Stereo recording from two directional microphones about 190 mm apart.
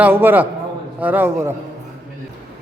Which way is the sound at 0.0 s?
10° right (ahead or behind).